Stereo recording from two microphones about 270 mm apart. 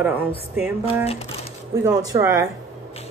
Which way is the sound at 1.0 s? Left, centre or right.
Left.